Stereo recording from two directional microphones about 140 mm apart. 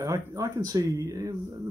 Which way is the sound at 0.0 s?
20° right (ahead or behind).